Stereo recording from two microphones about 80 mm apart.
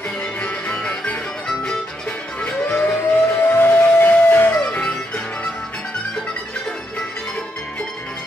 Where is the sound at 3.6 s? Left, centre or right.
Left.